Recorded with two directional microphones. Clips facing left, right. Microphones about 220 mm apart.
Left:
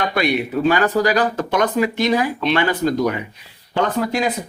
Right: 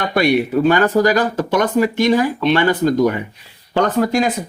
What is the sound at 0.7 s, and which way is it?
Speech, 45° right (ahead or behind).